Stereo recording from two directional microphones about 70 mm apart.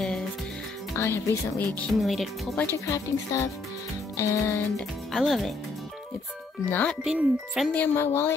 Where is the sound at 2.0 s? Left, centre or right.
Centre.